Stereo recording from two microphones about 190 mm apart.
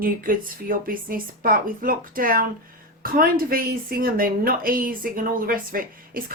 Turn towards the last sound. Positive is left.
turn(degrees=-50)  # may be behind; listen again after turning